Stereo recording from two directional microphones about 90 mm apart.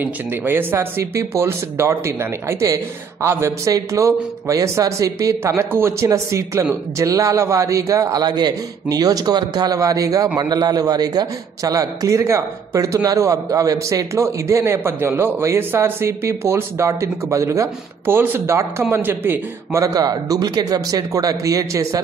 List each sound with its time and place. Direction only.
0.0 s a man's voice: 20° right (ahead or behind)
8.2 s a man's voice: 50° right (ahead or behind); by 19.8 s 25° right (ahead or behind)
19.8 s a man's voice: 45° right (ahead or behind)